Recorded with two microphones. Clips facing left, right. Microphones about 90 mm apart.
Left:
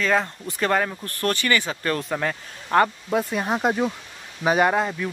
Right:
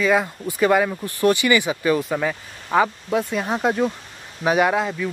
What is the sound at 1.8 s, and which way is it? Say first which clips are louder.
Speech: right 5 dB; 5° right (ahead or behind).